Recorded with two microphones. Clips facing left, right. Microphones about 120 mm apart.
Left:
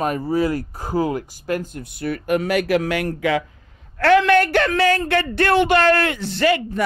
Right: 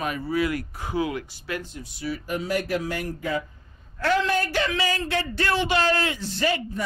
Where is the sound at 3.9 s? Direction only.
70° left (ahead or behind).